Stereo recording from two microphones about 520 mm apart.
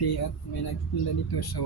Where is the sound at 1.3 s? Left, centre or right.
Left.